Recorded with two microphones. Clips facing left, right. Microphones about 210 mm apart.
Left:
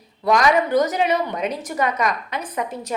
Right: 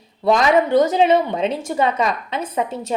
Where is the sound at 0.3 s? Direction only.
25° right (ahead or behind).